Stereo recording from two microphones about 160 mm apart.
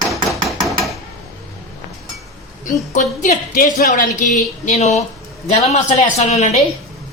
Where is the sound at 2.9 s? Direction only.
55° left (ahead or behind).